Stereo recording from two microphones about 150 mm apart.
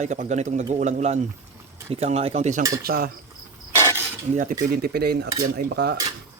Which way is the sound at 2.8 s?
85° right.